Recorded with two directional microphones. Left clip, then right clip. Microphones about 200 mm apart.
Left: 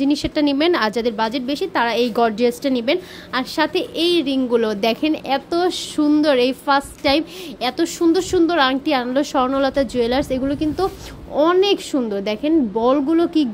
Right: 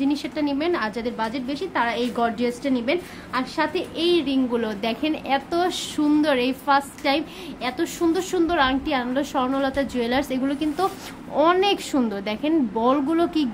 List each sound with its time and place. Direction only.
0.0 s a woman's voice: 30° left (ahead or behind)